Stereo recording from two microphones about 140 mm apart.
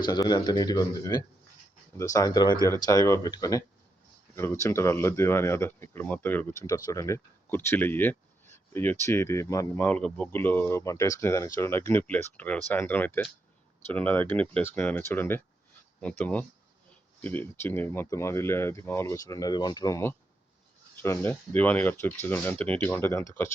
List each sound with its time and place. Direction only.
0.0 s speech: 30° left (ahead or behind); by 6.4 s 15° left (ahead or behind)
6.7 s speech: 25° left (ahead or behind)
9.7 s speech: 10° left (ahead or behind)